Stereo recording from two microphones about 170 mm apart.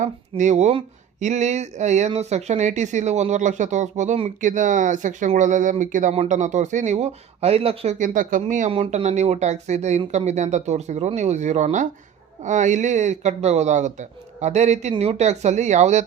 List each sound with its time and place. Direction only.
0.0 s speech: 45° right (ahead or behind)
8.7 s speech: 35° right (ahead or behind)